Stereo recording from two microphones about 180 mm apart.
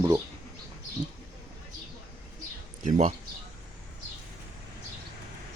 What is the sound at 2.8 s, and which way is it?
Speech, 35° right (ahead or behind).